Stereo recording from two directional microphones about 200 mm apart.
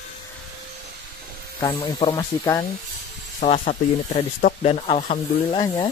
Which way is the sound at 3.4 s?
30° left (ahead or behind).